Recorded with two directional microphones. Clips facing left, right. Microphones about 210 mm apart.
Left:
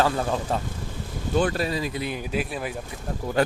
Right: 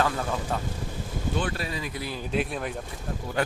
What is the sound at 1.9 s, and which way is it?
Speech, 20° left (ahead or behind).